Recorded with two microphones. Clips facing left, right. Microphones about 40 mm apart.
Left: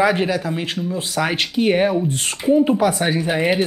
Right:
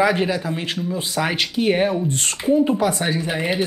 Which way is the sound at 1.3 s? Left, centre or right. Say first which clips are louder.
Left 2 dB; centre.